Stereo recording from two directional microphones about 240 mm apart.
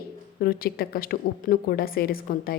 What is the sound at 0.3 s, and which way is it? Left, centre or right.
A woman's voice, left.